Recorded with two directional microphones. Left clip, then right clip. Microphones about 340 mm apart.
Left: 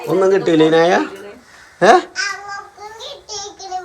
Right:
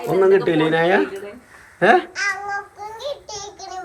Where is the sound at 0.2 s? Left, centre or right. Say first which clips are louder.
Left 3 dB; centre.